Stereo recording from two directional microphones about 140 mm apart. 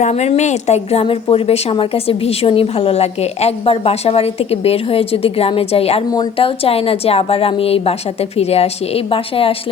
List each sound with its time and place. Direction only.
0.0 s a woman's voice: 50° left (ahead or behind)